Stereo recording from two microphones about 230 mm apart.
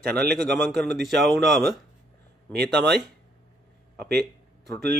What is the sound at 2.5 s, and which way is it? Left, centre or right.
Speech, right.